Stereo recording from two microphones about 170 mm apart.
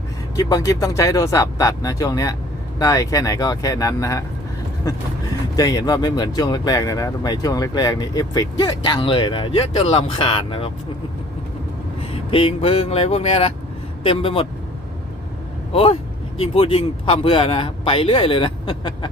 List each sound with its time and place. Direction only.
0.3 s speech: 20° left (ahead or behind)
5.5 s speech: 20° left (ahead or behind)
12.3 s a man's voice: 30° left (ahead or behind)
15.7 s a man's voice: 35° left (ahead or behind)